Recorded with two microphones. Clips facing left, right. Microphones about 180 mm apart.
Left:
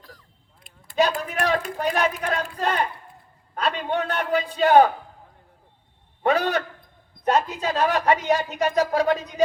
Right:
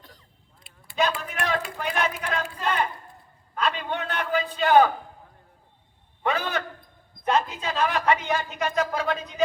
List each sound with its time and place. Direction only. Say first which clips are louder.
0.6 s speech: left 4 dB; 40° left (ahead or behind)
6.2 s speech: left 5 dB; 40° left (ahead or behind)